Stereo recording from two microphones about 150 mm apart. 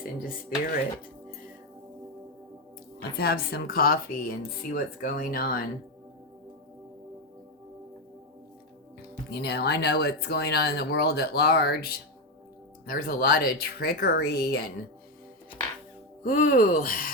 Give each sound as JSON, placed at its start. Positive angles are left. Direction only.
{"t": 0.0, "sound": "music", "side_deg": 65}
{"t": 3.2, "sound": "speech", "side_deg": 90}
{"t": 9.0, "sound": "speech", "side_deg": 90}
{"t": 12.8, "sound": "speech", "side_deg": 80}
{"t": 16.2, "sound": "speech", "side_deg": 60}